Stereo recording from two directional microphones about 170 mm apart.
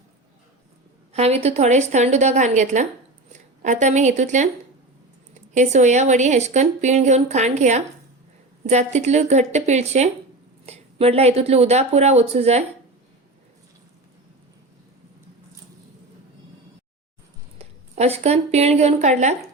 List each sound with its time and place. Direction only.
1.1 s a woman's voice: 40° right (ahead or behind)
17.6 s speech: 40° right (ahead or behind)